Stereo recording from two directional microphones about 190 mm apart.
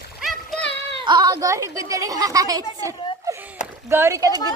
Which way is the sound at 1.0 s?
20° right (ahead or behind).